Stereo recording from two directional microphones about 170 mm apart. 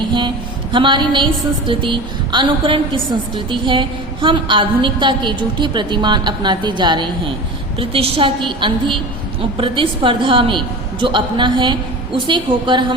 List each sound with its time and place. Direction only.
0.7 s a woman's voice: 30° right (ahead or behind)